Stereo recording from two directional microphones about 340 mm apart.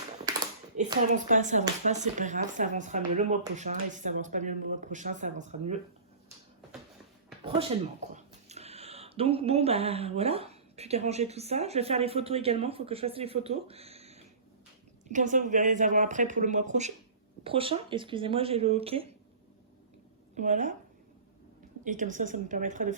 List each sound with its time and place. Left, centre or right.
0.3 s speech: centre
7.4 s speech: centre
20.3 s speech: right
21.8 s speech: right